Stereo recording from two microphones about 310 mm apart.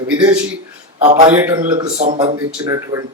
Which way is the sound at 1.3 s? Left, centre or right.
Centre.